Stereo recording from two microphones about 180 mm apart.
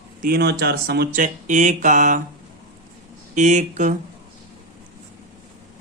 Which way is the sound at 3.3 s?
40° right (ahead or behind).